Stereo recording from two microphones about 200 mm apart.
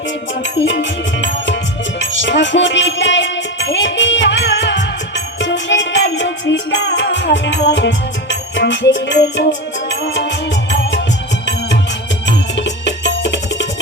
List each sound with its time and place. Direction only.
0.6 s music: 65° left (ahead or behind)
10.5 s music: 60° left (ahead or behind)
12.2 s music: 60° left (ahead or behind)